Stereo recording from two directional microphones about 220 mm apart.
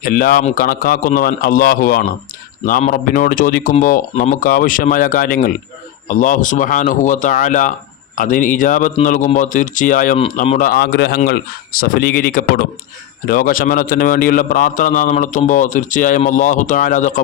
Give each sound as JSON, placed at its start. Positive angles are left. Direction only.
{"t": 0.0, "sound": "speech", "side_deg": 40}
{"t": 10.7, "sound": "speech", "side_deg": 45}